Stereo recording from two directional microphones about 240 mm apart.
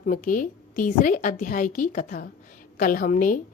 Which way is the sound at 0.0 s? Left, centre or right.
Left.